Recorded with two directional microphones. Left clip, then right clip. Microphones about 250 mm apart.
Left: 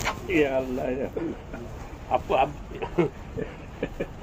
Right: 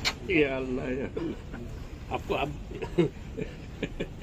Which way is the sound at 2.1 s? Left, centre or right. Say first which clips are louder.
Left 8 dB; right.